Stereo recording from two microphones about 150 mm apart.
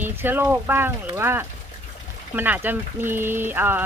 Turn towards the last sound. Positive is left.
turn(degrees=-15)  # may be behind; listen again after turning